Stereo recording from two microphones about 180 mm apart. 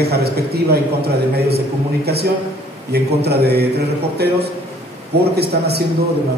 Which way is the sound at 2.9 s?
65° right (ahead or behind).